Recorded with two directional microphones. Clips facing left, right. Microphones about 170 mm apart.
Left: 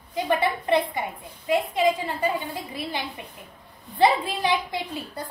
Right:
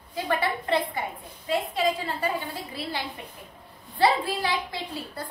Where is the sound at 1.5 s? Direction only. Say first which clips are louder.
Left 4 dB; 15° left (ahead or behind).